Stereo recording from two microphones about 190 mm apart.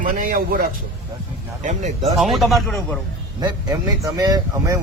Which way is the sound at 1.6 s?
40° right (ahead or behind).